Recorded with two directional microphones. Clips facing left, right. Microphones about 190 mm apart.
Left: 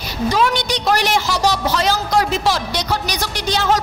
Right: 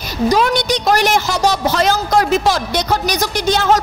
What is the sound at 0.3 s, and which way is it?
A woman's voice, 45° right (ahead or behind).